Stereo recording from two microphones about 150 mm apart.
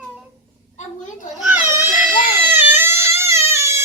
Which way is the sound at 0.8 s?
55° left (ahead or behind).